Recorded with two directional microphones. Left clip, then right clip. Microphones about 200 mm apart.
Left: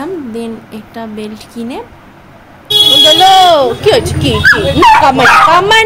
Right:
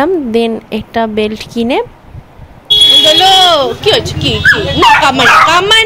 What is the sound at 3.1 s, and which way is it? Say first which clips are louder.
Speech: left 1 dB; centre (ahead or behind).